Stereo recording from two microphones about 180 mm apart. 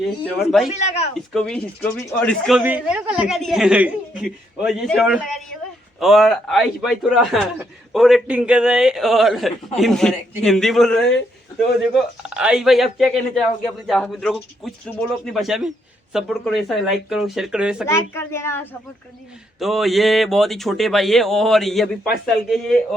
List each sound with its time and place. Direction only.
0.7 s speech: 35° left (ahead or behind)
1.1 s speech: 5° left (ahead or behind)
17.8 s speech: 15° left (ahead or behind)
19.5 s speech: centre (ahead or behind)